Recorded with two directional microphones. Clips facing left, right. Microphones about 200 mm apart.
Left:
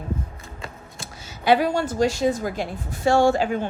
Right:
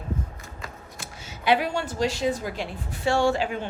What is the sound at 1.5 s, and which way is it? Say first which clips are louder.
A woman's voice: left 4 dB; 45° left (ahead or behind).